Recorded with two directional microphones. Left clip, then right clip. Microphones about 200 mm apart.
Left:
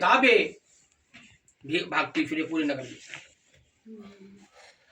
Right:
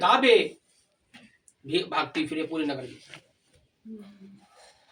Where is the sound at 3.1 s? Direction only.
35° right (ahead or behind).